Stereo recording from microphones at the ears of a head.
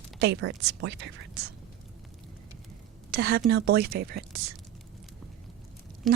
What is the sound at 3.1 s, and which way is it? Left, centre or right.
Speech, right.